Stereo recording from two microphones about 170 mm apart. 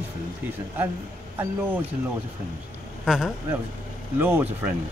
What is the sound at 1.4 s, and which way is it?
Speech, 10° right (ahead or behind).